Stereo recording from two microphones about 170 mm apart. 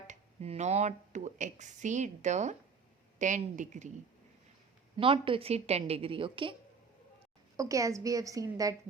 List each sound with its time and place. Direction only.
0.1 s speech: 40° right (ahead or behind)
4.9 s a woman's voice: 30° right (ahead or behind)
7.5 s a woman's voice: 20° right (ahead or behind)